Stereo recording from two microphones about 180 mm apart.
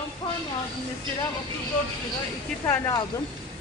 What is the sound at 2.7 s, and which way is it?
Speech, 15° left (ahead or behind).